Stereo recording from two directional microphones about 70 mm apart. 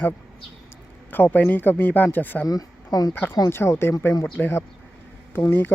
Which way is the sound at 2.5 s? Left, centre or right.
Left.